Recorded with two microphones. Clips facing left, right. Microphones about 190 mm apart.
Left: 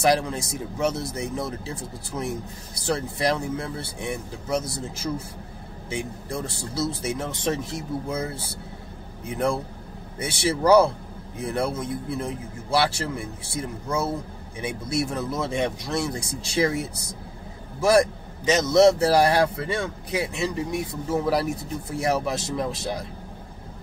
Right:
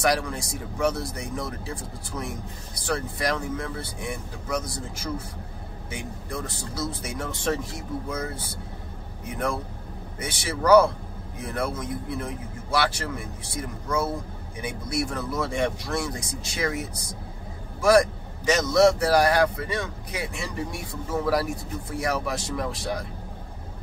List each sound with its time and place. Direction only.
0.0 s a man's voice: 25° left (ahead or behind)
10.1 s a man's voice: 25° left (ahead or behind)